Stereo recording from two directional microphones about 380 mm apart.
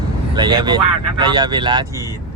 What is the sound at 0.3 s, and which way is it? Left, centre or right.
Speech, centre.